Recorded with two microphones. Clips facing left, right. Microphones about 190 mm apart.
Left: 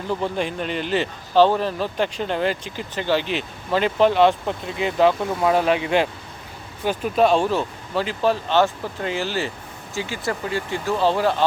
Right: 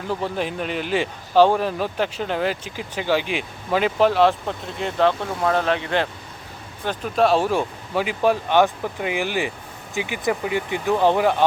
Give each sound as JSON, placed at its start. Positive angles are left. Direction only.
{"t": 0.1, "sound": "speech", "side_deg": -5}